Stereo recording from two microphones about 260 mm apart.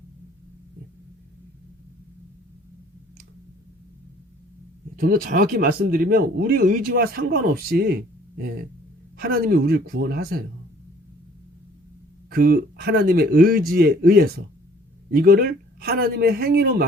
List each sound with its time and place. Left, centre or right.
4.9 s speech: right
9.1 s speech: right
12.3 s speech: right